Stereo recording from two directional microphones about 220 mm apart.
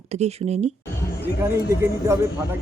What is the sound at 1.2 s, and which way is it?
Speech, 10° right (ahead or behind).